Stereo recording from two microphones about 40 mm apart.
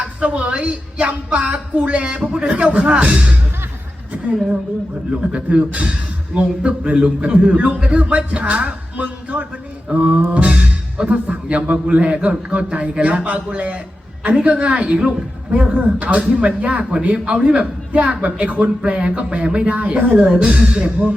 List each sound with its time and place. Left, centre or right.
0.0 s speech: right
5.3 s speech: right
10.4 s music: right
11.7 s speech: right
15.8 s speech: right
16.2 s speech: right